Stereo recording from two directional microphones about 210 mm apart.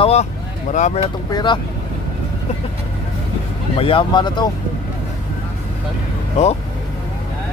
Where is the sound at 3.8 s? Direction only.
25° left (ahead or behind).